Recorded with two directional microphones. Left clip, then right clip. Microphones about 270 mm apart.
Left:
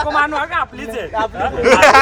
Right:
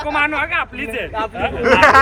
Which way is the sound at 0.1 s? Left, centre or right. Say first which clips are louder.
Right 3 dB; centre.